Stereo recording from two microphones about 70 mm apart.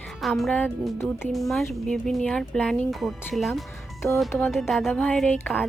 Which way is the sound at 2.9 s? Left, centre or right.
Centre.